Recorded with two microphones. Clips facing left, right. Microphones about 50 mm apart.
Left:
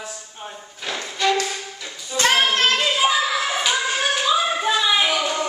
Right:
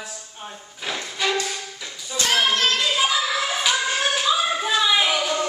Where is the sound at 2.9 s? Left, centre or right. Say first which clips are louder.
Left 2 dB; centre.